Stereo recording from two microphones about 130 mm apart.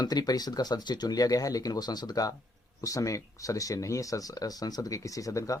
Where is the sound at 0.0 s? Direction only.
30° left (ahead or behind).